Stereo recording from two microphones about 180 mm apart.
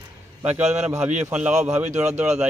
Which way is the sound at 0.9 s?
10° right (ahead or behind).